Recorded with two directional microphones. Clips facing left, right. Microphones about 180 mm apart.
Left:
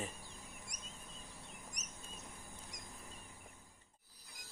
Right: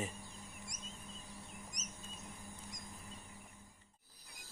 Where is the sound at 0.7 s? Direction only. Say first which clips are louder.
Right 2 dB; 65° left (ahead or behind).